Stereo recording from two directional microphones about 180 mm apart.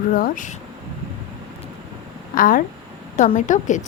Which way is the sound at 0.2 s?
45° left (ahead or behind).